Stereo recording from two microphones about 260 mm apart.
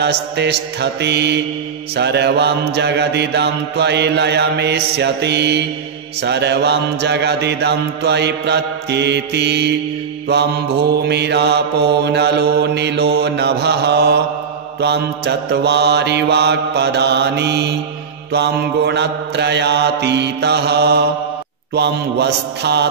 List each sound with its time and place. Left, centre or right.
0.0 s mantra: right